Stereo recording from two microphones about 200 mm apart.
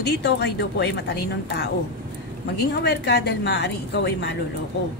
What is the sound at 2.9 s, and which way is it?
A woman's voice, 55° left (ahead or behind).